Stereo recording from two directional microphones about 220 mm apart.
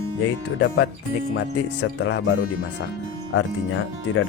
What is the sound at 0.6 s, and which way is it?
Speech, 50° left (ahead or behind).